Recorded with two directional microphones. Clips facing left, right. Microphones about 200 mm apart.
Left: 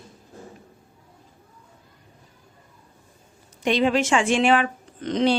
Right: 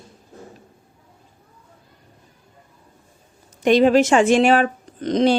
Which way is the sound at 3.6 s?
45° right (ahead or behind).